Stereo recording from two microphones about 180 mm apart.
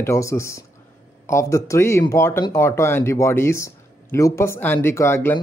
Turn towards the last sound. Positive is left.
turn(degrees=15)  # may be behind; listen again after turning